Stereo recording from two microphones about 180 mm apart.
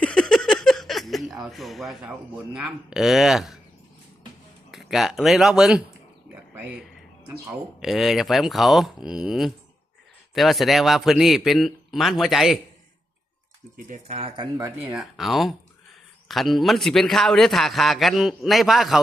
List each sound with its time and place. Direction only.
0.0 s speech: 5° left (ahead or behind)
4.7 s speech: centre (ahead or behind)
6.3 s a sound: 10° right (ahead or behind)
7.8 s a man's voice: centre (ahead or behind)
13.7 s speech: 45° right (ahead or behind)
14.6 s a man's voice: 10° right (ahead or behind)